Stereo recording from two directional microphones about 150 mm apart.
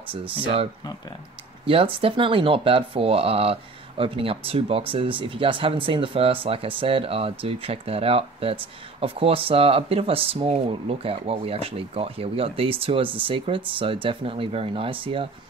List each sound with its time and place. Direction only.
1.7 s speech: 35° right (ahead or behind)